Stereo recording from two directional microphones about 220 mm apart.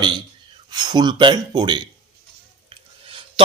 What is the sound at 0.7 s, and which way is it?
Speech, 20° right (ahead or behind).